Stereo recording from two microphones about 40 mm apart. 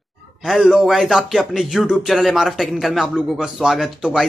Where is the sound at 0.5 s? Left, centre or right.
Centre.